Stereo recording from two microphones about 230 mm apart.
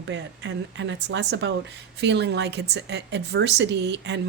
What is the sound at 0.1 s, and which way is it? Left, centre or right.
A woman's voice, right.